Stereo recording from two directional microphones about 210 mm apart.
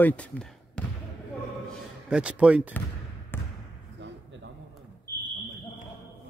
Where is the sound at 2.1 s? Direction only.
5° right (ahead or behind).